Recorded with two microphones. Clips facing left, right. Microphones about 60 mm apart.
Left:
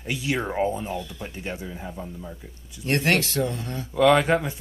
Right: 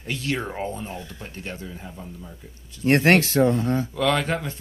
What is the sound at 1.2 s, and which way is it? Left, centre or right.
Speech, centre.